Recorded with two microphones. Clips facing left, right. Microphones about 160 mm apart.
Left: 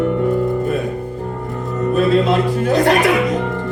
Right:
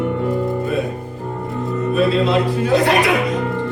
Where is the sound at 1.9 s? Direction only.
45° left (ahead or behind).